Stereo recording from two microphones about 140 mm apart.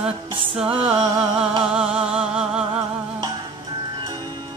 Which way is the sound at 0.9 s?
30° right (ahead or behind).